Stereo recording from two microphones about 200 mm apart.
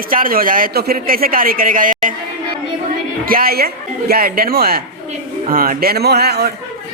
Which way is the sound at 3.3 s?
50° right (ahead or behind).